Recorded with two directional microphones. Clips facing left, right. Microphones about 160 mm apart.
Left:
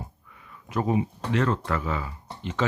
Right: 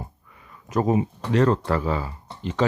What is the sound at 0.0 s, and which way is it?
Speech, 40° right (ahead or behind).